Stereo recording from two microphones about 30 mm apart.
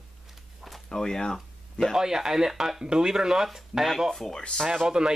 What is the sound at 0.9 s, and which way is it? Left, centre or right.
Speech, left.